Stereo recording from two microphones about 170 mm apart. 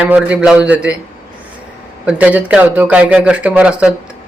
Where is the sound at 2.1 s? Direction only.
10° right (ahead or behind).